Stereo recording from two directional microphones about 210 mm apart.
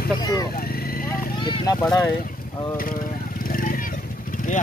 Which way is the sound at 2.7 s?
45° left (ahead or behind).